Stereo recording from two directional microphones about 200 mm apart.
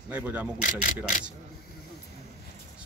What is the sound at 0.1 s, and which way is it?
Speech, 10° right (ahead or behind).